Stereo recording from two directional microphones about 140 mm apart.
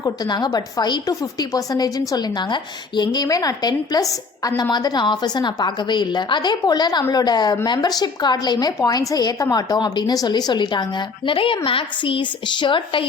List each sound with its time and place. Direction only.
0.0 s a woman's voice: 30° left (ahead or behind)